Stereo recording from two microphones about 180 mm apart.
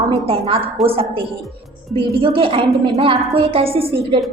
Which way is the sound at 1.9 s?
30° right (ahead or behind).